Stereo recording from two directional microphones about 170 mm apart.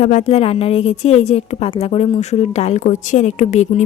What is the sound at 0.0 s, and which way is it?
A woman's voice, 40° left (ahead or behind).